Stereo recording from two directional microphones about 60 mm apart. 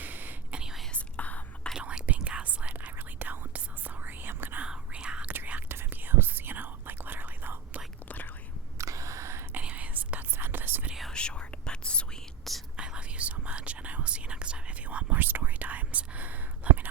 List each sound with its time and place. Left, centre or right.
0.0 s whispering: right
0.5 s whispering: centre
0.9 s whispering: left
1.8 s whispering: right
4.6 s whispering: centre
5.3 s whispering: right
8.0 s whispering: left
8.8 s a sound: right
9.6 s whispering: right
10.3 s whispering: right
11.1 s whispering: centre
12.7 s whispering: centre